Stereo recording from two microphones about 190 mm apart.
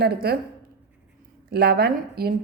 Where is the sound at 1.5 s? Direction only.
55° right (ahead or behind).